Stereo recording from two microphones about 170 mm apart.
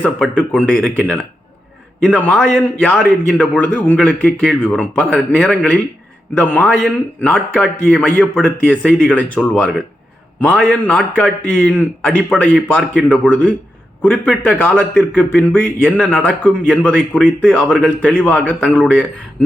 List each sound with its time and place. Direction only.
0.0 s a man's voice: 10° left (ahead or behind)